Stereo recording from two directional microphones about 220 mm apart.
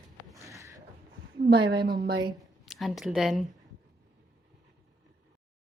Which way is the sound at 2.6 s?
Centre (ahead or behind).